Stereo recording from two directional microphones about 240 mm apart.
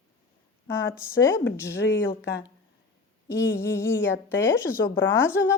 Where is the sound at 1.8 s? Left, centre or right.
Left.